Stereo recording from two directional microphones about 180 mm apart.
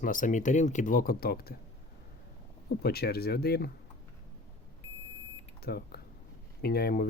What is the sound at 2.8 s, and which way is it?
Speech, 60° left (ahead or behind).